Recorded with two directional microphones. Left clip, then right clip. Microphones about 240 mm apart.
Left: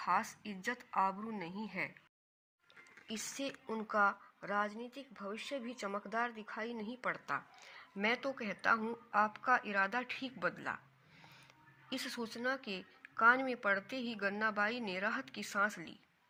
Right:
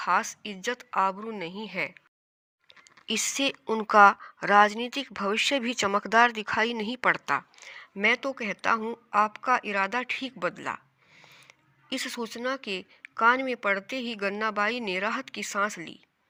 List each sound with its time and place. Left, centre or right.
0.0 s speech: right